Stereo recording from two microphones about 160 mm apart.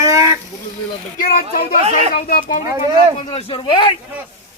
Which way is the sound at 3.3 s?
35° left (ahead or behind).